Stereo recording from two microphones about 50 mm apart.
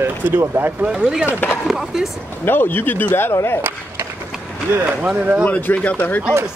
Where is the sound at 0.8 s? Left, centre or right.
Right.